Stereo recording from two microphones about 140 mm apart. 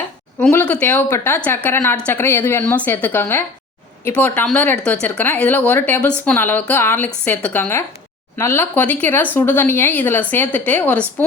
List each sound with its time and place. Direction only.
0.3 s speech: 10° left (ahead or behind)